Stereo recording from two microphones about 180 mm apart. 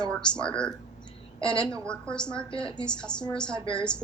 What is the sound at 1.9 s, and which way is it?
Speech, 5° left (ahead or behind).